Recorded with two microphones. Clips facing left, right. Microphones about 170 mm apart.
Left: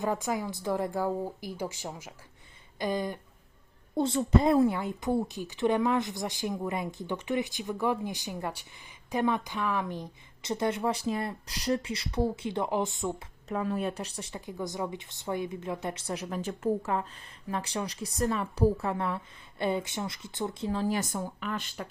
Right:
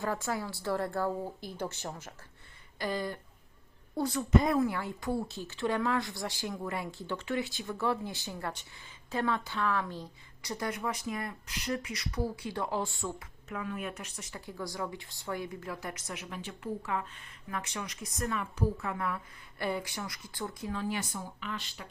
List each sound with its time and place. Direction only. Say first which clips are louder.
0.0 s speech: left 3 dB; 15° left (ahead or behind)
2.7 s a sound: left 3 dB; 20° left (ahead or behind)
3.9 s a woman's voice: left 2 dB; 25° left (ahead or behind)
13.5 s speech: left 7 dB; 35° left (ahead or behind); by 21.8 s 50° left (ahead or behind)